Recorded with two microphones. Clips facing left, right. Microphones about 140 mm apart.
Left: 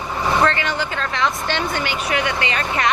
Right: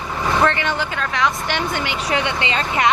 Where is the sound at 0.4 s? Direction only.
20° right (ahead or behind).